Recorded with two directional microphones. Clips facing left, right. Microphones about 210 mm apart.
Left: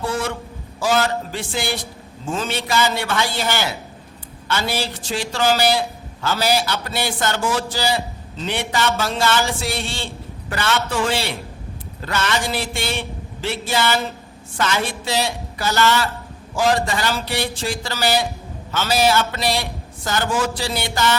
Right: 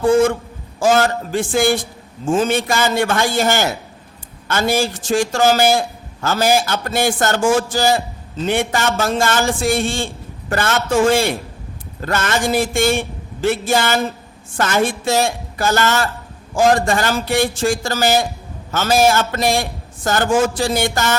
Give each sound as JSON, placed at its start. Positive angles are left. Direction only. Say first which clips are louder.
{"t": 0.0, "sound": "a man's voice", "louder": "right 11 dB", "side_deg": -50}